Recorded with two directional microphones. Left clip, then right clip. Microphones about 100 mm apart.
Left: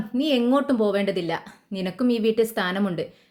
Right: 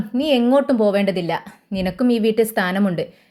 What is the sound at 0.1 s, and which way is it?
A woman's voice, 45° right (ahead or behind).